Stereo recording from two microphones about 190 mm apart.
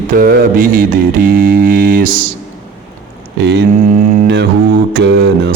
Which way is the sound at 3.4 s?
65° right (ahead or behind).